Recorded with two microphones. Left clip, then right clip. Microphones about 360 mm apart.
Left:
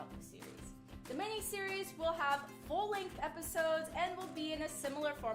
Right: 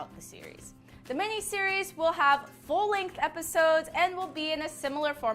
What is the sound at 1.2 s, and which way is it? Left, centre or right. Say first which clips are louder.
Speech: right 11 dB; right.